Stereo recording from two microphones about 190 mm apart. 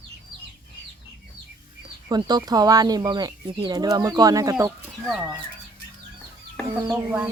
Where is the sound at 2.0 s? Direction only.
20° right (ahead or behind).